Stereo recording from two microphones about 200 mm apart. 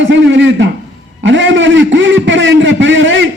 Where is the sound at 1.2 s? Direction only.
65° right (ahead or behind).